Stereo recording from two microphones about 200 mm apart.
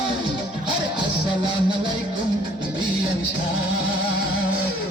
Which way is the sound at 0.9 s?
25° right (ahead or behind).